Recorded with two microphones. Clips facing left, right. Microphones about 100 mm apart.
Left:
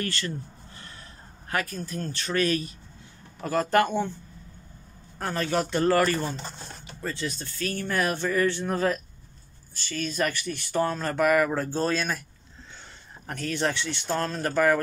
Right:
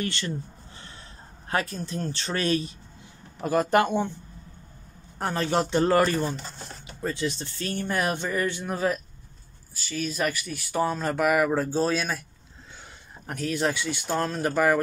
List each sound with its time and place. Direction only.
0.0 s speech: 20° right (ahead or behind)
1.5 s speech: 25° right (ahead or behind)
5.2 s speech: 25° right (ahead or behind); by 12.2 s 5° right (ahead or behind)
13.3 s speech: 5° right (ahead or behind)